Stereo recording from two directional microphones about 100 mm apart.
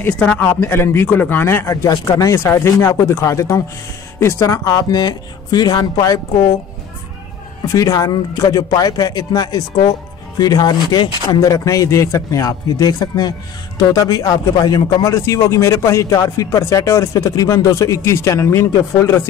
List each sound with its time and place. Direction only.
0.2 s speech: 15° left (ahead or behind); by 6.2 s 40° left (ahead or behind)
7.6 s speech: 35° left (ahead or behind)